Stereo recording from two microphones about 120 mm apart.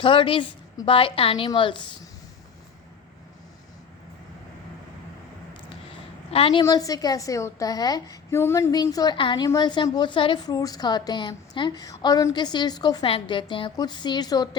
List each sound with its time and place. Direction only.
0.0 s a woman's voice: 45° left (ahead or behind)
6.3 s a woman's voice: 50° left (ahead or behind)
6.6 s a woman's voice: 30° left (ahead or behind)
8.7 s a woman's voice: 30° left (ahead or behind)
13.1 s a woman's voice: 45° left (ahead or behind)